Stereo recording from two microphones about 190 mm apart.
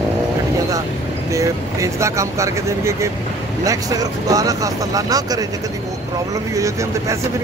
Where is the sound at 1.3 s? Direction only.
15° right (ahead or behind).